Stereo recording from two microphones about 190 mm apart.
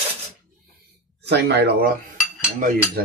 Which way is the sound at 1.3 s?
60° right (ahead or behind).